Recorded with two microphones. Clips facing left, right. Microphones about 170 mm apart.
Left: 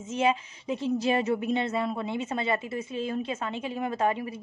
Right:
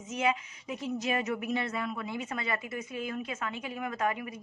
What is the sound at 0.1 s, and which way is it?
A woman's voice, 30° left (ahead or behind).